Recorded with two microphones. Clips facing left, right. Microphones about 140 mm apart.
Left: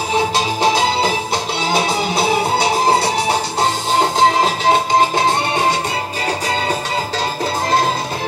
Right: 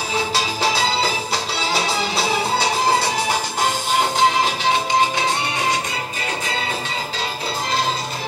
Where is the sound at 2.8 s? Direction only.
30° left (ahead or behind).